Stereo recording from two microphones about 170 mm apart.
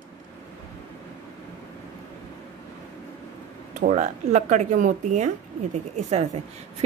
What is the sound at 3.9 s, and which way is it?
Speech, 45° right (ahead or behind).